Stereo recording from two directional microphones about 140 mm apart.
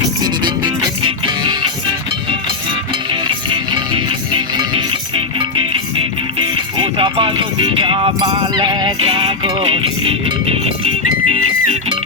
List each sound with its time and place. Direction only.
0.2 s music: 30° right (ahead or behind)
3.1 s music: 35° right (ahead or behind)